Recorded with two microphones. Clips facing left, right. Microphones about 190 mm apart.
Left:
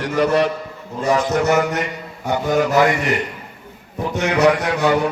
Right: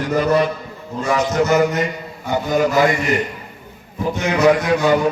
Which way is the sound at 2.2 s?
70° left (ahead or behind).